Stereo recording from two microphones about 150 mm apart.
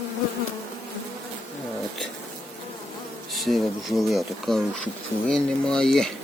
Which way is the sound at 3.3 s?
Centre (ahead or behind).